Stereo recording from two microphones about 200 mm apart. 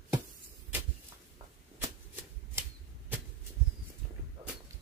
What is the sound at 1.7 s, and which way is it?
Shuffling cards, 10° right (ahead or behind).